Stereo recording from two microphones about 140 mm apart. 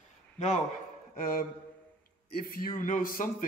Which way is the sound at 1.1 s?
90° left.